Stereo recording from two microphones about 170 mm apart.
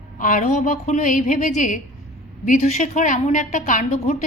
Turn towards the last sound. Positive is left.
turn(degrees=45)  # may be behind; listen again after turning